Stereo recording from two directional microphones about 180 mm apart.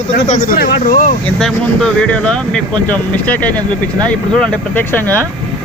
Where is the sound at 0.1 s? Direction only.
45° left (ahead or behind).